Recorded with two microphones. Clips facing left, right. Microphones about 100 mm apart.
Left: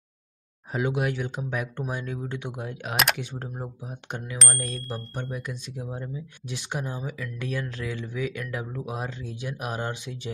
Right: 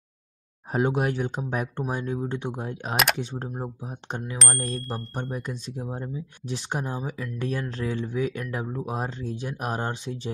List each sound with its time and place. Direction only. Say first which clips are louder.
0.7 s speech: right 3 dB; 45° right (ahead or behind)
4.4 s a sound: right 2 dB; centre (ahead or behind)
5.3 s speech: right 2 dB; 35° right (ahead or behind)